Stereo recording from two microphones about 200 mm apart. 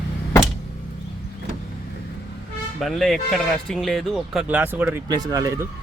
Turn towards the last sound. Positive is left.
turn(degrees=-15)  # may be behind; listen again after turning